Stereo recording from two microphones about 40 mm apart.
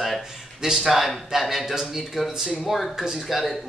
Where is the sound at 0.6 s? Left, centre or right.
Centre.